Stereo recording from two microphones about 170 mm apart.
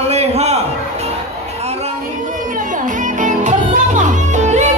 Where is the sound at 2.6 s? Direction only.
50° right (ahead or behind).